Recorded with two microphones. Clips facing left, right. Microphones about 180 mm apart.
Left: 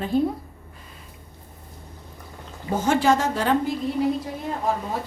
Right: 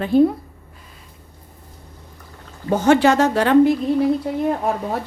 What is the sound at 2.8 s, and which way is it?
Speech, 70° right (ahead or behind).